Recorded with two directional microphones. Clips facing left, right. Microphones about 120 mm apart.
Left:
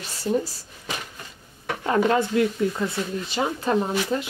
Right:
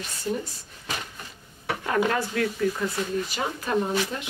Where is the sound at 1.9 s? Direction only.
25° left (ahead or behind).